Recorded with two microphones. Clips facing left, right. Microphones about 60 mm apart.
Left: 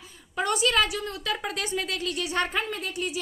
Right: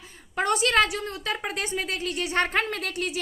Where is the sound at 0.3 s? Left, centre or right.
Right.